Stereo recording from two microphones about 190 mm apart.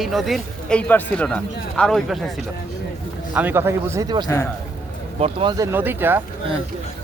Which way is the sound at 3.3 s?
10° right (ahead or behind).